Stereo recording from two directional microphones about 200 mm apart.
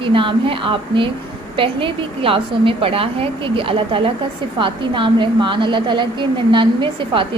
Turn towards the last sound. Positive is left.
turn(degrees=-25)  # may be behind; listen again after turning